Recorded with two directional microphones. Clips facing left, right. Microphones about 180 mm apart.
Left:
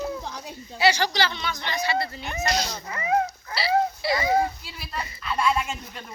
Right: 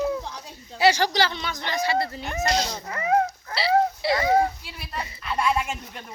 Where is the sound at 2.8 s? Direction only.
45° right (ahead or behind).